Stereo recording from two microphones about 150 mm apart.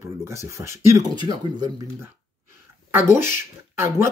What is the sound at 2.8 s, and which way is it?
Speech, 15° right (ahead or behind).